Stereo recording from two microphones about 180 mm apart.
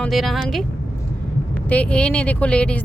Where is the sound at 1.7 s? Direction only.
5° left (ahead or behind).